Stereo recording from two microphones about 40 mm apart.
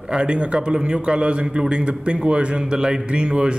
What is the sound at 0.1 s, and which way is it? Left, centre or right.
A man's voice, right.